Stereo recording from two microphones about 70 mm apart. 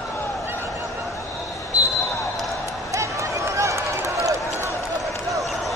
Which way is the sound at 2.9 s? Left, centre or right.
Right.